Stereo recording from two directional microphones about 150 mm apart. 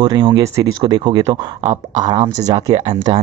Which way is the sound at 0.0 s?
30° right (ahead or behind).